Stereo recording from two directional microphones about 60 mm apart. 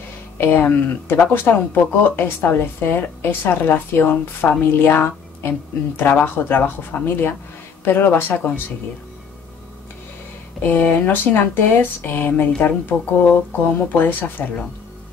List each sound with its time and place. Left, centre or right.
0.4 s speech: left
10.6 s a woman's voice: left